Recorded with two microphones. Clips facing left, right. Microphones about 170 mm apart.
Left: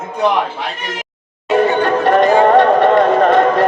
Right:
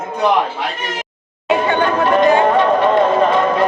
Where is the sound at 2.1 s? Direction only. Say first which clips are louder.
Left 3 dB; 60° left (ahead or behind).